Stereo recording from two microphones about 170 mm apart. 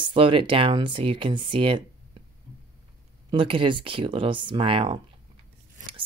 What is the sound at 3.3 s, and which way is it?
Speech, 30° right (ahead or behind).